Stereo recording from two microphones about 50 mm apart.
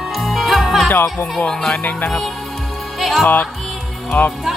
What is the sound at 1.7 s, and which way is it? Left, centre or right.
Music, left.